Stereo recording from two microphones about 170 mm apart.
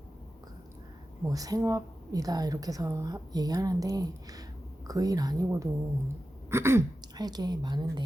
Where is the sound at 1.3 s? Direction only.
20° right (ahead or behind).